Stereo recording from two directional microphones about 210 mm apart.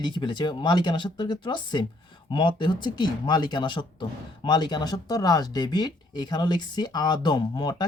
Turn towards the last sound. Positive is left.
turn(degrees=20)  # may be behind; listen again after turning